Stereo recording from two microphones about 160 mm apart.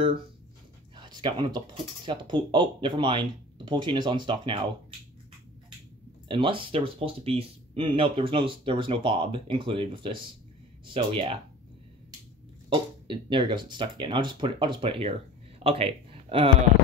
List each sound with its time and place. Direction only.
0.9 s speech: 30° right (ahead or behind)
6.2 s speech: 30° right (ahead or behind)
12.6 s speech: 30° right (ahead or behind)